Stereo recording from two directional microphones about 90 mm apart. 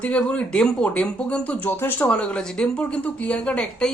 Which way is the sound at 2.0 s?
10° left (ahead or behind).